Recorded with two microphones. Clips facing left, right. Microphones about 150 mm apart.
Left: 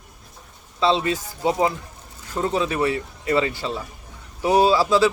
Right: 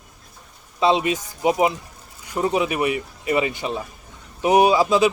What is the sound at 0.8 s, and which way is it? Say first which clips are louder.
A man's voice: right 1 dB; 20° right (ahead or behind).